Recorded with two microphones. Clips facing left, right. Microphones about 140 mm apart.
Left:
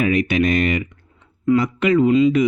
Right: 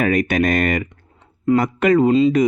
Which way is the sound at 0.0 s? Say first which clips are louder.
Even; 45° right (ahead or behind).